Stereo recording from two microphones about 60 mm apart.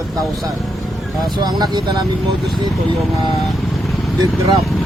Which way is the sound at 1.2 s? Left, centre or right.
Right.